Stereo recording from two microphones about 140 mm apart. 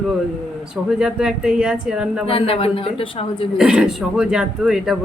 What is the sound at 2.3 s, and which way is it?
A woman's voice, 40° left (ahead or behind).